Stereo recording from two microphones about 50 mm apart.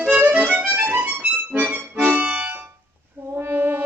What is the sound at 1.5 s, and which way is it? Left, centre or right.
Accordion, right.